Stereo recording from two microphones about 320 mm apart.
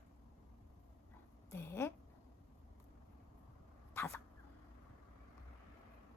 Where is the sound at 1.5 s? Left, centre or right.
Centre.